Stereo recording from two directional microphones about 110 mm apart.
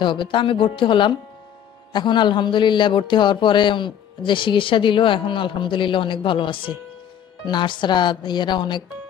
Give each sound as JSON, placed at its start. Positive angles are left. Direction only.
{"t": 0.0, "sound": "a man's voice", "side_deg": 45}